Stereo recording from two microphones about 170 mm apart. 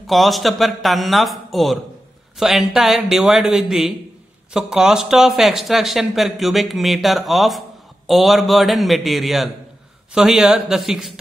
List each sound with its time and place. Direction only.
0.0 s speech: centre (ahead or behind)